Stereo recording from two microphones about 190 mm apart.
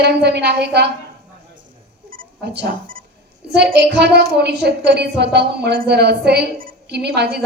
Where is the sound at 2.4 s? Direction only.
60° right (ahead or behind).